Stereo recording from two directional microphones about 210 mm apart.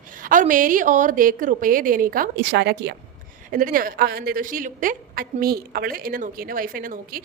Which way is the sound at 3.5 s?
40° right (ahead or behind).